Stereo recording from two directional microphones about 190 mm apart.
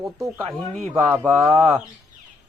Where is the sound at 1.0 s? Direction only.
15° right (ahead or behind).